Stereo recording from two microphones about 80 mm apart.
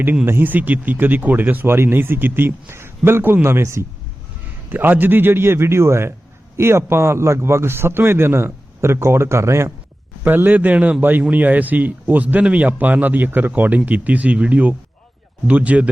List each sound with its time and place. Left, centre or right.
0.3 s speech: right
4.7 s a man's voice: right
10.2 s speech: right